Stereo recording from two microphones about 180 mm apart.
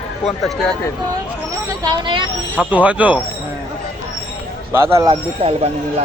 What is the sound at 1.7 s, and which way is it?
Speech, 25° right (ahead or behind).